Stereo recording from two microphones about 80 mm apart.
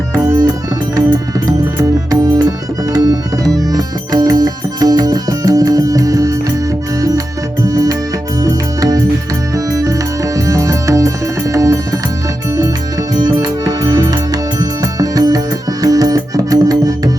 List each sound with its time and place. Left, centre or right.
0.9 s music: right
7.6 s music: right
10.3 s music: right
13.1 s music: right